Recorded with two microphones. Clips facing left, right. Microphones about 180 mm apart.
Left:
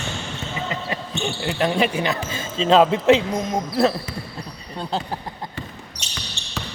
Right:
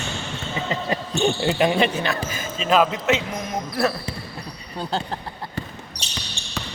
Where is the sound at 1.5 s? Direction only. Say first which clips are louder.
Left 1 dB; 15° right (ahead or behind).